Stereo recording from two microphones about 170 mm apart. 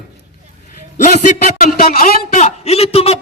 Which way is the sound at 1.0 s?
45° left (ahead or behind).